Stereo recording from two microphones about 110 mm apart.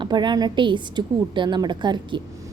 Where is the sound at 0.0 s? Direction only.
45° right (ahead or behind).